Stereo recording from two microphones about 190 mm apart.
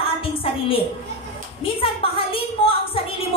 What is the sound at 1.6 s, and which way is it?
Speech, 30° left (ahead or behind).